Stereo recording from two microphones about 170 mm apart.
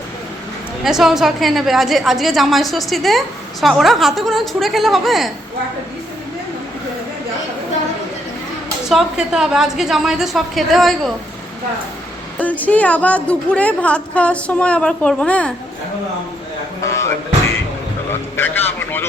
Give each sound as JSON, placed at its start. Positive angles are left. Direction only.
{"t": 0.9, "sound": "a woman's voice", "side_deg": 0}
{"t": 8.9, "sound": "a woman's voice", "side_deg": -5}
{"t": 12.4, "sound": "a woman's voice", "side_deg": 10}
{"t": 16.8, "sound": "music", "side_deg": 15}
{"t": 18.1, "sound": "a man's voice", "side_deg": 10}